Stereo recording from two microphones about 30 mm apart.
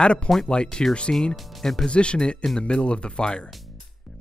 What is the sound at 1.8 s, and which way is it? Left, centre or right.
Speech, left.